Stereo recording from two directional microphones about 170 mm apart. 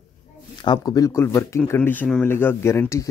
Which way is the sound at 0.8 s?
20° left (ahead or behind).